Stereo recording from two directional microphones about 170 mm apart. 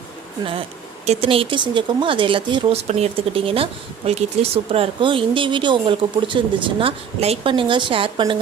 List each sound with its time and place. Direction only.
1.0 s speech: 35° right (ahead or behind)